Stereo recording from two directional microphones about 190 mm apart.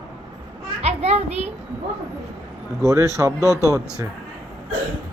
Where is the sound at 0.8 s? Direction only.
35° right (ahead or behind).